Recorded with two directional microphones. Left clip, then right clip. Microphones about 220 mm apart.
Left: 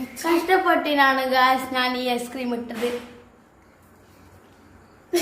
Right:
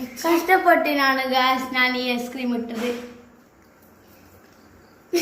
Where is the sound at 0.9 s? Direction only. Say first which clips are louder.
Left 2 dB; 10° left (ahead or behind).